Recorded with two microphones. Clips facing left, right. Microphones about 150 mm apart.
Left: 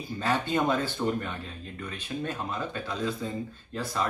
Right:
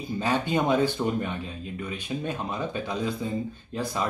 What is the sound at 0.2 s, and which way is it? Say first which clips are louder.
Speech: right 1 dB; 15° right (ahead or behind).